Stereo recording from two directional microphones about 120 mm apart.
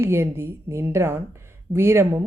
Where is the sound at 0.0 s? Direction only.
20° right (ahead or behind).